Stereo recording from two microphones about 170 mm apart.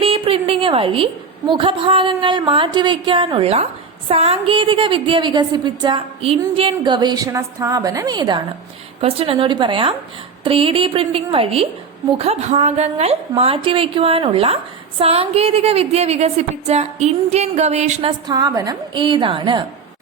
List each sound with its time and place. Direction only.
0.0 s a woman's voice: 35° right (ahead or behind)
18.3 s speech: 25° right (ahead or behind)